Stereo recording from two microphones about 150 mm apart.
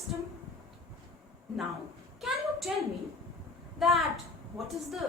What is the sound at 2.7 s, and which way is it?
A woman's voice, 5° right (ahead or behind).